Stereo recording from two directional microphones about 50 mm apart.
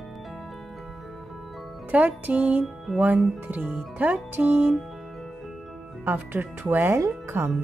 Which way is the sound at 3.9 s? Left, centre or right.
Right.